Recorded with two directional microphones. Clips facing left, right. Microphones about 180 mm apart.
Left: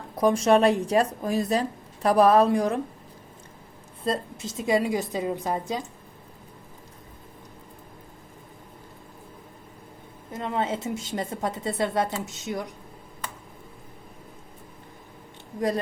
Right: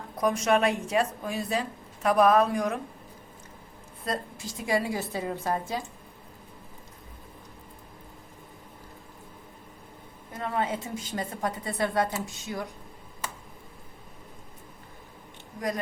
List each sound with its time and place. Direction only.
0.2 s speech: 30° left (ahead or behind)
4.0 s a woman's voice: 25° left (ahead or behind)
10.3 s a woman's voice: 20° left (ahead or behind)